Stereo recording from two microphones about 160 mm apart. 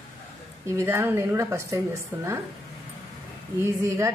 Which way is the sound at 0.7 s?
15° right (ahead or behind).